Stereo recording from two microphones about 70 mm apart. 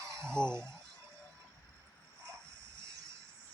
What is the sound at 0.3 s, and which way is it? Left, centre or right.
Speech, centre.